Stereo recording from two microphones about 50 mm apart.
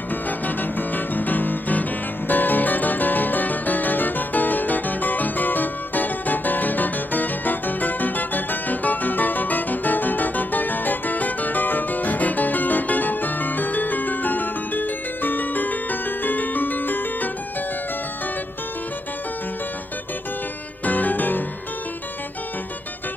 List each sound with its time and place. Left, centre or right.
0.1 s music: left
20.8 s music: left